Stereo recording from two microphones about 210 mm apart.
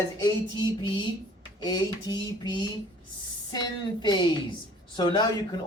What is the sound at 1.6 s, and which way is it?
Speech, 20° left (ahead or behind).